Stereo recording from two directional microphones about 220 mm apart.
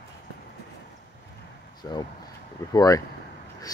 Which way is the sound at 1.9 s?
15° left (ahead or behind).